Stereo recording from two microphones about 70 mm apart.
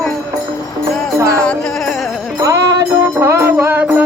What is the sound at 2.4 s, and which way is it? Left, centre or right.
Music, right.